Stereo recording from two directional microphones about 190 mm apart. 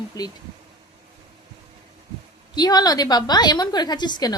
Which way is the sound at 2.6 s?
20° left (ahead or behind).